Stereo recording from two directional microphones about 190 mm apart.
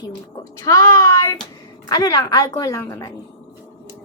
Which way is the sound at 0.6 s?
20° left (ahead or behind).